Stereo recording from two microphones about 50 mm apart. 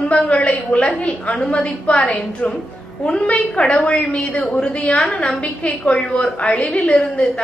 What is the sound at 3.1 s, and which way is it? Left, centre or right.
A woman's voice, left.